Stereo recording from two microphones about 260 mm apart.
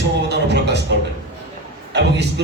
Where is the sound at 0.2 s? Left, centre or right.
Right.